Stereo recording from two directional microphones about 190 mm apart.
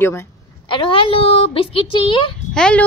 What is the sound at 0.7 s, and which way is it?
Speech, 25° left (ahead or behind).